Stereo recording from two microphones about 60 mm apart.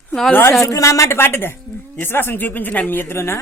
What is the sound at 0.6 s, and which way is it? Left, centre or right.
A woman's voice, left.